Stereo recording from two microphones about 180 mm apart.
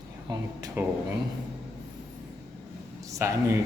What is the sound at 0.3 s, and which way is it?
Speech, 20° right (ahead or behind).